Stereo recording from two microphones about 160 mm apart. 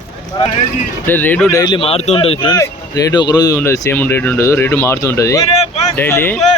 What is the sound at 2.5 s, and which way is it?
Speech, 20° left (ahead or behind).